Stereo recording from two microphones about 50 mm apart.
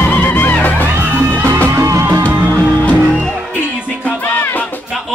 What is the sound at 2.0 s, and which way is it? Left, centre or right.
Music, right.